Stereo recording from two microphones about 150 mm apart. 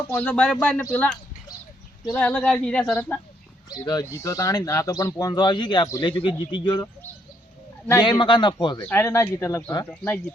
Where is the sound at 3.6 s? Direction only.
25° left (ahead or behind).